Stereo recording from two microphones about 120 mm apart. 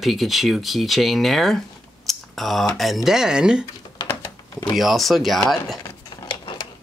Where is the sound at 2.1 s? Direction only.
Centre (ahead or behind).